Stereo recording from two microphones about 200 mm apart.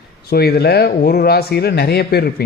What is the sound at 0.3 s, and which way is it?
A man's voice, 50° left (ahead or behind).